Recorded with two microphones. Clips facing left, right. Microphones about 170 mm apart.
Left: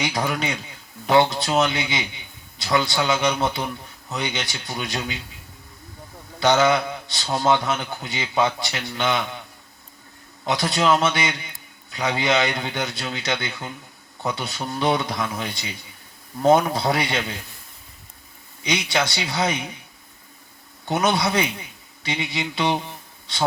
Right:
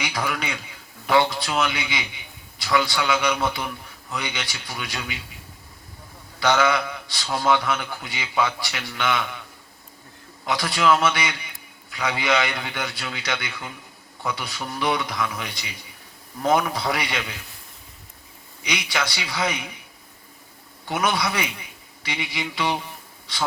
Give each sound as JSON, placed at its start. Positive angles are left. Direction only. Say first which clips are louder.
{"t": 0.0, "sound": "a man's voice", "louder": "left 3 dB", "side_deg": 25}
{"t": 6.4, "sound": "a man's voice", "louder": "left 3 dB", "side_deg": 25}
{"t": 10.4, "sound": "a man's voice", "louder": "left 1 dB", "side_deg": 25}
{"t": 18.6, "sound": "a man's voice", "louder": "left 4 dB", "side_deg": 25}
{"t": 20.8, "sound": "a man's voice", "louder": "left 3 dB", "side_deg": 25}